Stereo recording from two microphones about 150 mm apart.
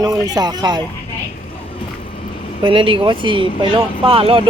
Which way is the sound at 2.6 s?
35° right (ahead or behind).